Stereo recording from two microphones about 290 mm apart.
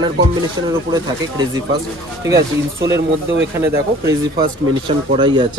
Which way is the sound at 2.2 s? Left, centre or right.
Centre.